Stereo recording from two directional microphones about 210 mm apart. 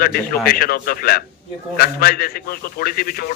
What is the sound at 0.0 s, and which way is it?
A man's voice, 45° left (ahead or behind).